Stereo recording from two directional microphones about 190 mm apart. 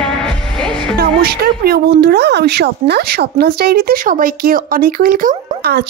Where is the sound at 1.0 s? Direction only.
55° right (ahead or behind).